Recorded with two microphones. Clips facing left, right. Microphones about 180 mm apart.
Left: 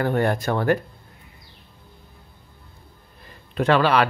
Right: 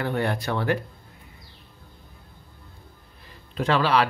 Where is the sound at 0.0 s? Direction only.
45° left (ahead or behind).